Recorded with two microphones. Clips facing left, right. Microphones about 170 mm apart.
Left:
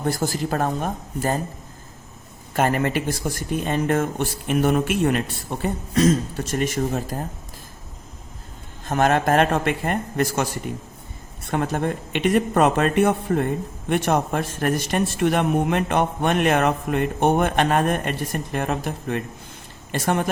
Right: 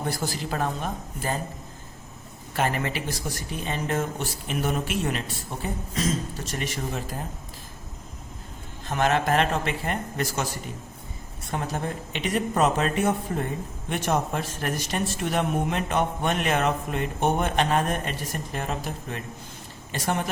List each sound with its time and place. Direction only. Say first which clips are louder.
0.1 s speech: left 10 dB; 45° left (ahead or behind)
2.6 s speech: left 6 dB; 50° left (ahead or behind)
5.6 s speech: left 9 dB; 65° left (ahead or behind); by 7.2 s 45° left (ahead or behind)
8.9 s speech: left 4 dB; 50° left (ahead or behind)
11.5 s speech: left 6 dB; 60° left (ahead or behind)